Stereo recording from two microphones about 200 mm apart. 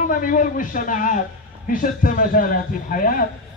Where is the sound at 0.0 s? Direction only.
45° left (ahead or behind).